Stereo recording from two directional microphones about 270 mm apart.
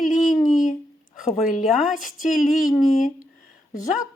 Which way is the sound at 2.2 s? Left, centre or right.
Left.